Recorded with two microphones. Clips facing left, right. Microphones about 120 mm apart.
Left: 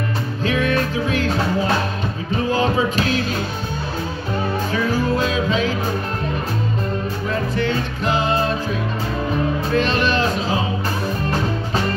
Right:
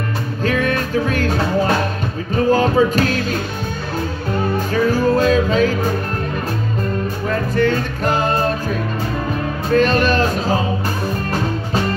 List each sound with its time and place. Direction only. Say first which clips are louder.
0.4 s music: right 1 dB; 45° right (ahead or behind)
2.3 s music: right 5 dB; 45° right (ahead or behind)
4.7 s music: right 5 dB; 40° right (ahead or behind)
7.5 s music: right 4 dB; 45° right (ahead or behind)
9.7 s music: right 7 dB; 45° right (ahead or behind)